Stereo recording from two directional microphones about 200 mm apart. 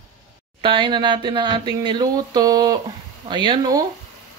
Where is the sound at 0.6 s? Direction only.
25° right (ahead or behind).